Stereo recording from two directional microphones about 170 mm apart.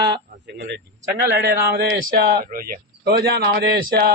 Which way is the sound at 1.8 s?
75° right (ahead or behind).